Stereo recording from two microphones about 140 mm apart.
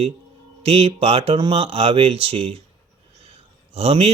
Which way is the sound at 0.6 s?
45° right (ahead or behind).